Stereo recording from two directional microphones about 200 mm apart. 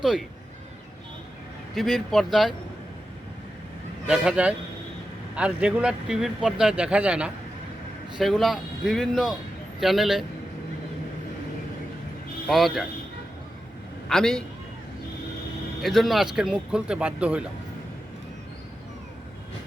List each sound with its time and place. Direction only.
1.7 s speech: centre (ahead or behind)
4.0 s speech: 5° right (ahead or behind)
12.5 s speech: centre (ahead or behind)
14.1 s speech: 5° left (ahead or behind)
15.8 s speech: centre (ahead or behind)